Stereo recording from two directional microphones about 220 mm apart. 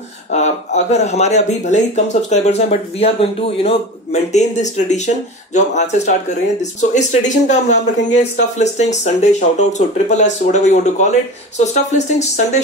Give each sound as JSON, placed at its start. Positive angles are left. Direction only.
{"t": 0.3, "sound": "speech", "side_deg": 30}